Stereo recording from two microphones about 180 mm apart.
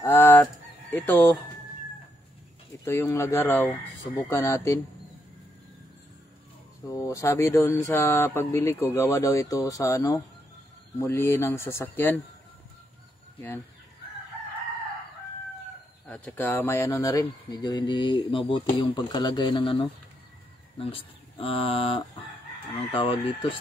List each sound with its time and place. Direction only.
0.0 s fowl: 15° left (ahead or behind)
0.9 s speech: 10° left (ahead or behind)
2.8 s speech: 15° left (ahead or behind)
6.9 s speech: 15° left (ahead or behind)
16.1 s speech: 10° left (ahead or behind); by 23.6 s 30° left (ahead or behind)